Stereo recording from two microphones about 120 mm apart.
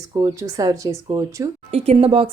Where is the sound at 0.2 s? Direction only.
30° right (ahead or behind).